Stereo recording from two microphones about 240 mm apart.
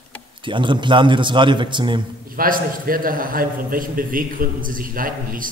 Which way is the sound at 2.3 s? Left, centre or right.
Right.